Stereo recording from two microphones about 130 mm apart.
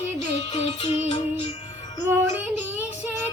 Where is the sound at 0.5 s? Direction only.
55° left (ahead or behind).